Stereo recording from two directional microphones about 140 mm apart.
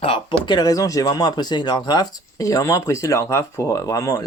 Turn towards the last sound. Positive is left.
turn(degrees=25)  # may be behind; listen again after turning